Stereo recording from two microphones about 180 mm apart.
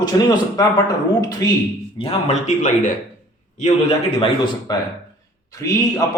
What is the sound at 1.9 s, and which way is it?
Speech, 35° left (ahead or behind).